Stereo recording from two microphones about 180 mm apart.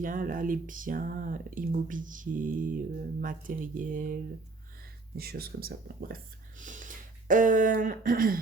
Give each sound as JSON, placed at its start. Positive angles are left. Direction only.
{"t": 0.0, "sound": "speech", "side_deg": -50}